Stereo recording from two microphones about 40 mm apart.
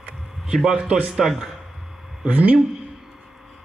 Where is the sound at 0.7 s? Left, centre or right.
Right.